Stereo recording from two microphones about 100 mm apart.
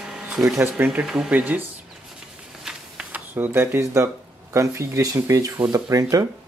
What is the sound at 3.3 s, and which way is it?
Speech, 25° right (ahead or behind).